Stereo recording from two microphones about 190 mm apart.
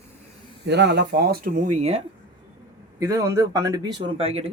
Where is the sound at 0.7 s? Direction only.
60° right (ahead or behind); by 2.0 s 35° right (ahead or behind).